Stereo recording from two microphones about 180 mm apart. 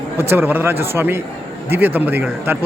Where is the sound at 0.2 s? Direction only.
10° right (ahead or behind).